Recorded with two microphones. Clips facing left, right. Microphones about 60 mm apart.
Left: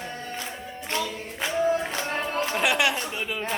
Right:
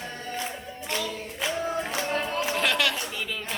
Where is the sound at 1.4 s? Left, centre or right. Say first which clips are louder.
Left 5 dB; left.